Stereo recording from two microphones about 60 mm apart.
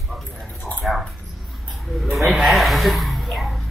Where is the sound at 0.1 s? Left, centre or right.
Centre.